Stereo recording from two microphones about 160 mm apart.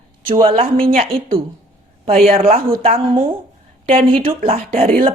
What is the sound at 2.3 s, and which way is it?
Speech, 65° right (ahead or behind).